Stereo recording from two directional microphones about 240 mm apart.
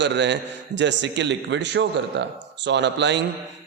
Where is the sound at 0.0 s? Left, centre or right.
Right.